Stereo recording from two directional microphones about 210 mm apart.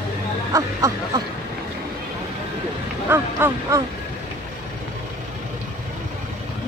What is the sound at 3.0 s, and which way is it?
Speech, 10° right (ahead or behind).